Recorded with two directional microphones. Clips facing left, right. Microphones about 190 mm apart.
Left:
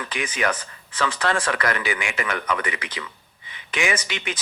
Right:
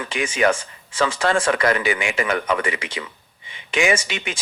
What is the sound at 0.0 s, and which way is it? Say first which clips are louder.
Speech: right 6 dB; 25° right (ahead or behind).